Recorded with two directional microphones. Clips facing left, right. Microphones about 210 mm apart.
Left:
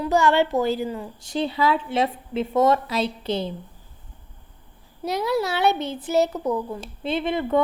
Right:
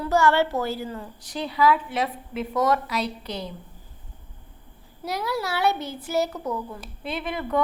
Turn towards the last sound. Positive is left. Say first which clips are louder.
# left 5 dB
turn(degrees=25)  # may be behind; listen again after turning